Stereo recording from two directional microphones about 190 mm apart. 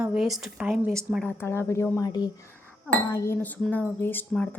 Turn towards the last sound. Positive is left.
turn(degrees=10)  # may be behind; listen again after turning